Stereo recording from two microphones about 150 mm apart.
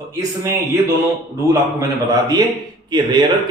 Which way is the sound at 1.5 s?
20° right (ahead or behind).